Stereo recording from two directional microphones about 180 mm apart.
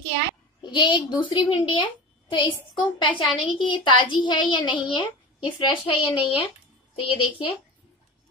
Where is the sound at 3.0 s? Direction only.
30° left (ahead or behind).